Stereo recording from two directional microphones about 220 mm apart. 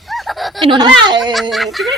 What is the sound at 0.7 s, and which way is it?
Speech, 20° right (ahead or behind).